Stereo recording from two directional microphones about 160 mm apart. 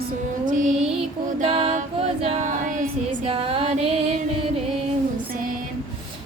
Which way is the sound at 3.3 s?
35° right (ahead or behind).